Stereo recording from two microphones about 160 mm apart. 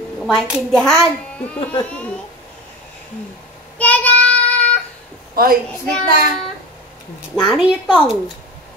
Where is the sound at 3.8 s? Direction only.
10° left (ahead or behind).